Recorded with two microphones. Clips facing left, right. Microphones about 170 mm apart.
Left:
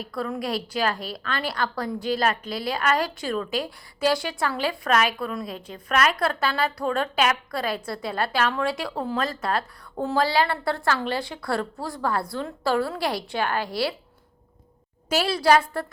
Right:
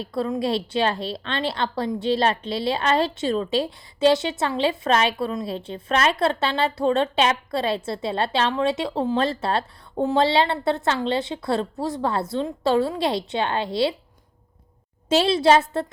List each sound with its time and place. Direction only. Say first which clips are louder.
0.0 s a woman's voice: right 5 dB; 25° right (ahead or behind)
15.1 s a woman's voice: right 3 dB; 25° right (ahead or behind)